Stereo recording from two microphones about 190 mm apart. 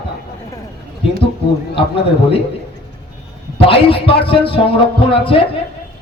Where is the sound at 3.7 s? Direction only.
30° left (ahead or behind).